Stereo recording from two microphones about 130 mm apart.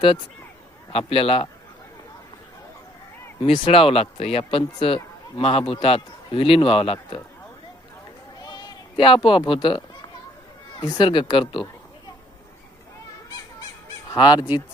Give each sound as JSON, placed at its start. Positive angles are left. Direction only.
{"t": 0.9, "sound": "speech", "side_deg": 50}
{"t": 3.4, "sound": "speech", "side_deg": 45}
{"t": 8.4, "sound": "bleat", "side_deg": 35}
{"t": 10.8, "sound": "speech", "side_deg": 35}
{"t": 14.1, "sound": "speech", "side_deg": 35}